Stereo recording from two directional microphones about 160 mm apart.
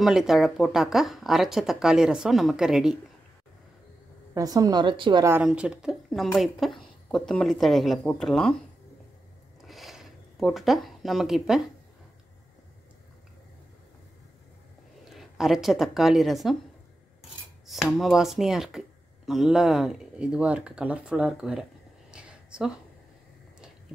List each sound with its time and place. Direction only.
0.0 s speech: 5° right (ahead or behind)
4.3 s a woman's voice: 20° right (ahead or behind)
5.2 s speech: 10° right (ahead or behind)
9.7 s a sound: centre (ahead or behind)
15.0 s speech: centre (ahead or behind)
17.2 s cutlery: centre (ahead or behind)
22.1 s a sound: 5° right (ahead or behind)